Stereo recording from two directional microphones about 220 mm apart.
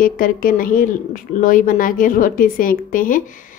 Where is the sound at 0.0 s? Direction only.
40° left (ahead or behind).